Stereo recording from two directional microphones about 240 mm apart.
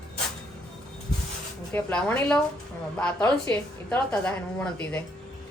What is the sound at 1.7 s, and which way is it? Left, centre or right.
Speech, centre.